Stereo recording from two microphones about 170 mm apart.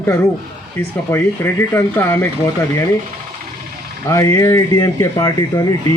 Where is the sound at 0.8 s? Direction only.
15° left (ahead or behind).